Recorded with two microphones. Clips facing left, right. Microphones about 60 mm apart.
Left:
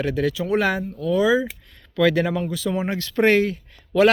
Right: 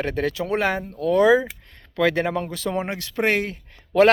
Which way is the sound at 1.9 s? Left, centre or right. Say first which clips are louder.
Left 2 dB; right.